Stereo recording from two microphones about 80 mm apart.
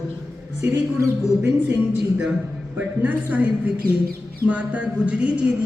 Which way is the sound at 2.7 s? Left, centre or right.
Right.